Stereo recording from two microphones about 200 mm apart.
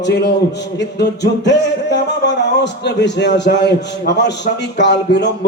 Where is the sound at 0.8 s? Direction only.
60° left (ahead or behind).